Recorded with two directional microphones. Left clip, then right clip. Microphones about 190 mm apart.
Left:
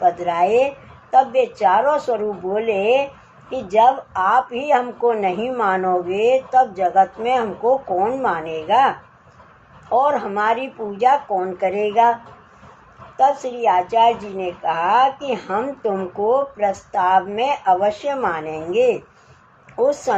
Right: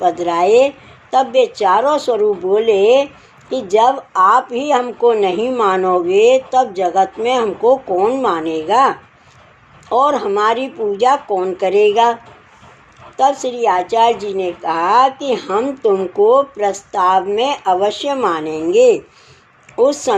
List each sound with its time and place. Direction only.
0.0 s speech: 30° right (ahead or behind)
2.1 s speech: 40° right (ahead or behind)
13.6 s speech: 30° right (ahead or behind)
18.7 s speech: 50° right (ahead or behind)
19.7 s speech: 25° right (ahead or behind)